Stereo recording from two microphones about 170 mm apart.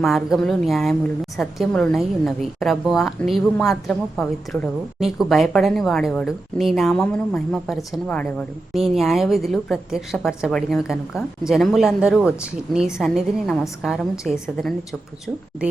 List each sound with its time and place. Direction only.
0.0 s a woman's voice: centre (ahead or behind)